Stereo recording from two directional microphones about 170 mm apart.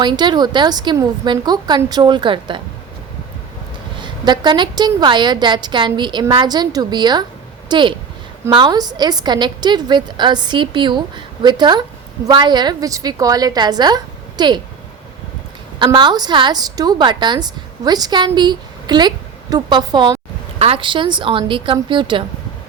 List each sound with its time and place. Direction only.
0.0 s a woman's voice: 25° right (ahead or behind)
4.0 s a woman's voice: 25° right (ahead or behind)
15.8 s a woman's voice: 25° right (ahead or behind)